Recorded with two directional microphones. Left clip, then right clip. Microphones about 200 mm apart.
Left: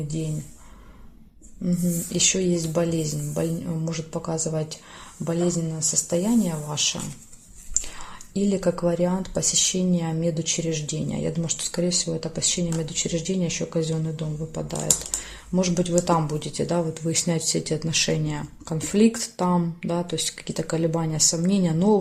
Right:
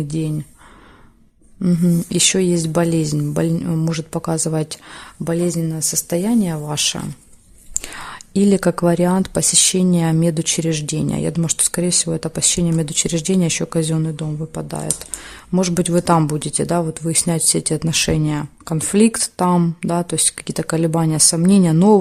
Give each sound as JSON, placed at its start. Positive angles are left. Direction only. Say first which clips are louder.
{"t": 0.1, "sound": "speech", "louder": "right 8 dB", "side_deg": -55}
{"t": 1.6, "sound": "speech", "louder": "right 8 dB", "side_deg": -55}
{"t": 6.1, "sound": "speech", "louder": "right 5 dB", "side_deg": -55}